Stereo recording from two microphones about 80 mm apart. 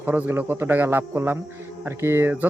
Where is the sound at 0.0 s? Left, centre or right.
Centre.